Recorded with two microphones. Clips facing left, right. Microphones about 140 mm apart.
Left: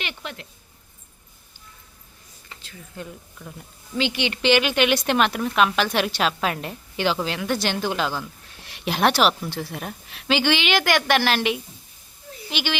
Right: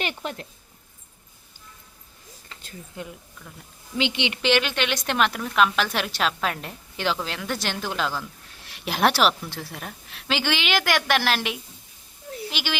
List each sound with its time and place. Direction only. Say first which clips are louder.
0.0 s speech: right 4 dB; 40° right (ahead or behind)
3.0 s a woman's voice: left 2 dB; 20° right (ahead or behind)
4.4 s speech: left 4 dB; 5° left (ahead or behind)